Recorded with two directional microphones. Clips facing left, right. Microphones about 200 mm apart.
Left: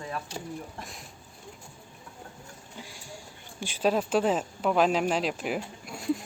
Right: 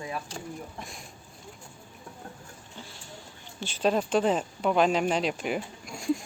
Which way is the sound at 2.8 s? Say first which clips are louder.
Left 1 dB; 10° left (ahead or behind).